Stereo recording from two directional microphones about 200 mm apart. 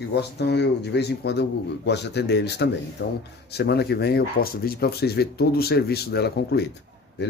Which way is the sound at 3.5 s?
55° left (ahead or behind).